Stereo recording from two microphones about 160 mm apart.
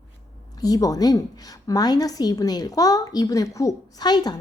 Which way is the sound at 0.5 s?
25° left (ahead or behind).